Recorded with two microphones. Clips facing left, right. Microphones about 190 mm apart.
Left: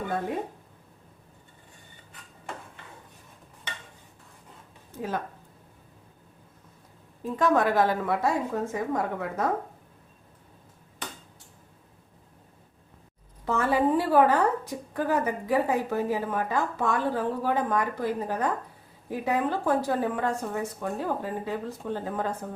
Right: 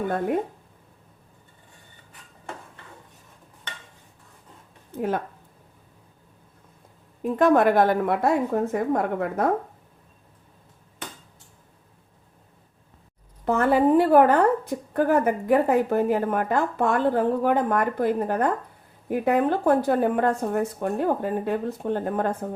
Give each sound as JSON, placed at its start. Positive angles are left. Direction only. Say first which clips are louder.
{"t": 4.9, "sound": "a woman's voice", "louder": "right 6 dB", "side_deg": -60}
{"t": 7.2, "sound": "a woman's voice", "louder": "right 5 dB", "side_deg": -60}
{"t": 13.4, "sound": "a woman's voice", "louder": "right 5 dB", "side_deg": -55}